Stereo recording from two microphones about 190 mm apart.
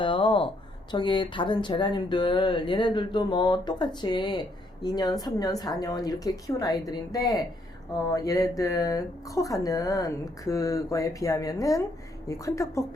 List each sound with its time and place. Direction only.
0.0 s speech: 25° left (ahead or behind)